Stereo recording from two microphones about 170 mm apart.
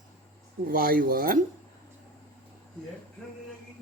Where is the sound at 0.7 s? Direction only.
60° right (ahead or behind).